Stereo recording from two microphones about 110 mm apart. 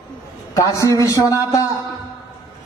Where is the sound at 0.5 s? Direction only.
30° left (ahead or behind).